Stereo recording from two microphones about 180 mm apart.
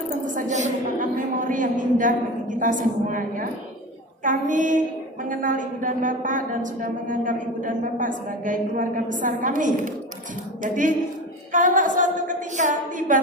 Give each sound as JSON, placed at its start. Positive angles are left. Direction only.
{"t": 0.3, "sound": "a woman's voice", "side_deg": -45}